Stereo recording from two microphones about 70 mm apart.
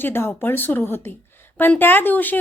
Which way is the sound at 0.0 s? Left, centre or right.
Left.